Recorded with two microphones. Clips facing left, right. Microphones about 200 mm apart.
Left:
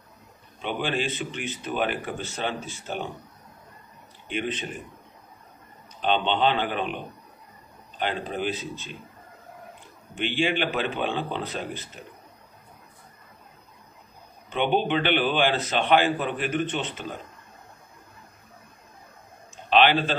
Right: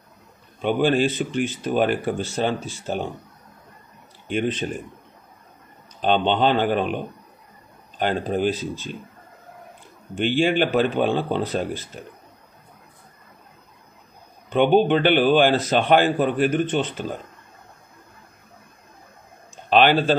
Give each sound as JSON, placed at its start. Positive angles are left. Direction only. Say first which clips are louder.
{"t": 0.6, "sound": "speech", "louder": "right 9 dB", "side_deg": -45}
{"t": 5.9, "sound": "speech", "louder": "right 4 dB", "side_deg": -40}
{"t": 8.0, "sound": "speech", "louder": "right 6 dB", "side_deg": -45}
{"t": 10.1, "sound": "speech", "louder": "right 6 dB", "side_deg": -45}
{"t": 14.5, "sound": "speech", "louder": "right 7 dB", "side_deg": -40}
{"t": 19.7, "sound": "a man's voice", "louder": "right 4 dB", "side_deg": -45}